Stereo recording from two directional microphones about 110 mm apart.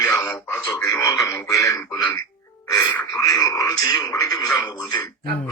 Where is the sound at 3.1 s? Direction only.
30° left (ahead or behind).